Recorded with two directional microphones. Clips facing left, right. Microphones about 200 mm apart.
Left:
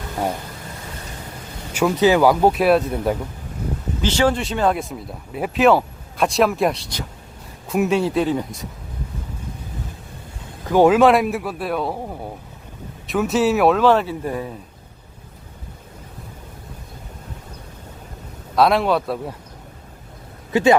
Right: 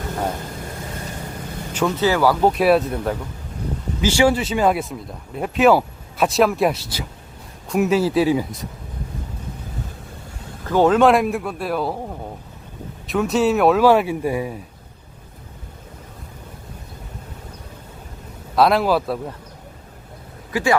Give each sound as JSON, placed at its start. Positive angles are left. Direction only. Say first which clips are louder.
{"t": 1.7, "sound": "speech", "louder": "left 3 dB", "side_deg": 15}
{"t": 2.5, "sound": "speech", "louder": "even", "side_deg": 0}
{"t": 4.0, "sound": "speech", "louder": "right 2 dB", "side_deg": -10}
{"t": 10.7, "sound": "speech", "louder": "left 1 dB", "side_deg": 10}
{"t": 18.5, "sound": "speech", "louder": "even", "side_deg": 0}
{"t": 20.5, "sound": "a man's voice", "louder": "left 5 dB", "side_deg": 25}